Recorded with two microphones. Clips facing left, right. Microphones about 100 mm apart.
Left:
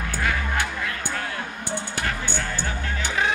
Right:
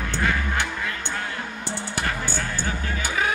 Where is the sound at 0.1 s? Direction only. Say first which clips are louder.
Right 1 dB; 25° right (ahead or behind).